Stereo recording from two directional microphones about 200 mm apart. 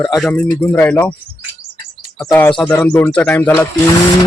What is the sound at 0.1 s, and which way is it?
Speech, centre (ahead or behind).